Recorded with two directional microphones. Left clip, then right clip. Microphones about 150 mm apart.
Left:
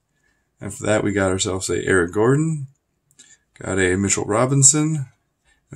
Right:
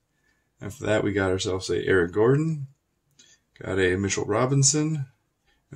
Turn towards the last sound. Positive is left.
turn(degrees=30)  # may be behind; listen again after turning